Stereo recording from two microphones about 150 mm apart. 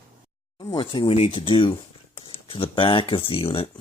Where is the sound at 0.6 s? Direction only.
30° left (ahead or behind).